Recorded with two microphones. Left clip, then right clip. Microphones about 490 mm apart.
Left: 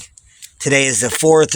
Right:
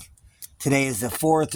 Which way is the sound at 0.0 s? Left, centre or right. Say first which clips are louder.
Left 8 dB; right.